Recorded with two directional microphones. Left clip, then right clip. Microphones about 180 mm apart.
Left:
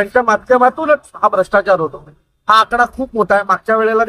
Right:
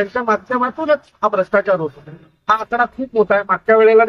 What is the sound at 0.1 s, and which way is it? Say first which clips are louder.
Speech: left 6 dB; 20° left (ahead or behind).